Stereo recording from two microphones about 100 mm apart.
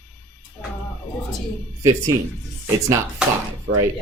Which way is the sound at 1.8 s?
30° right (ahead or behind).